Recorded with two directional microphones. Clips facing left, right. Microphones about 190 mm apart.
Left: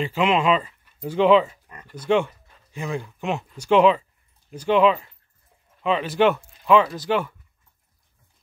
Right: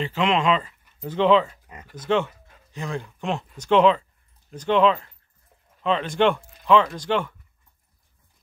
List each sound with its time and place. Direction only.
0.0 s speech: 10° left (ahead or behind)
1.7 s speech: 15° right (ahead or behind)
2.0 s speech: 10° left (ahead or behind)